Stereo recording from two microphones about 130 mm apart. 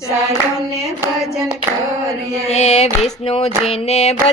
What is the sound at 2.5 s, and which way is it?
Child singing, 60° left (ahead or behind).